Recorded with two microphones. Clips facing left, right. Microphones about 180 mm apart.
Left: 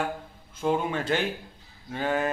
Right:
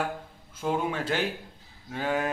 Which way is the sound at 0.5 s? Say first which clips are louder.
Left 2 dB; 5° right (ahead or behind).